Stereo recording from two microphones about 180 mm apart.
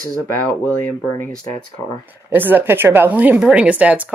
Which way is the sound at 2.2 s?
10° right (ahead or behind).